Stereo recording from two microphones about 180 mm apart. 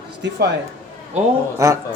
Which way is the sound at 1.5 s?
15° right (ahead or behind).